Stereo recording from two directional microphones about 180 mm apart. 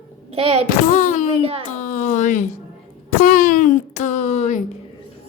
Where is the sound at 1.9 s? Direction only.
45° left (ahead or behind).